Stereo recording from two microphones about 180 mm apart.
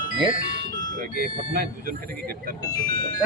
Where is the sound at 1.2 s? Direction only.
55° right (ahead or behind).